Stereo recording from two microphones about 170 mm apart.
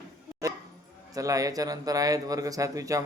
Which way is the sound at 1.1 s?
20° right (ahead or behind).